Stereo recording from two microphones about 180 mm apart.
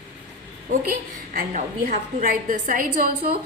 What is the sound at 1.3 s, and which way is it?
A woman's voice, 50° right (ahead or behind).